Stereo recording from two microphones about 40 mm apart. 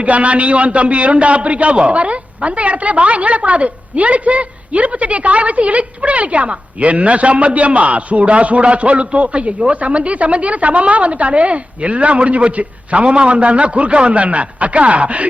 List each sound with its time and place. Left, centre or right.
0.0 s a man's voice: right